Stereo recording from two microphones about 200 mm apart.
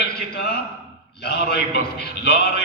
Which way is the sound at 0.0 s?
50° left (ahead or behind).